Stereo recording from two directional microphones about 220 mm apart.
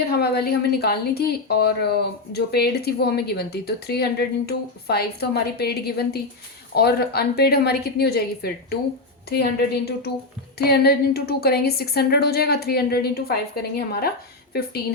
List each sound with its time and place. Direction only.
0.1 s speech: 45° left (ahead or behind)